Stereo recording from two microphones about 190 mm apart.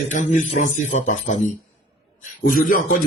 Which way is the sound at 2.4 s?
45° left (ahead or behind).